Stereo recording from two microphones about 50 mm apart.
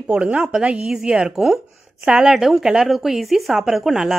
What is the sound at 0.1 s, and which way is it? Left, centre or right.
Speech, right.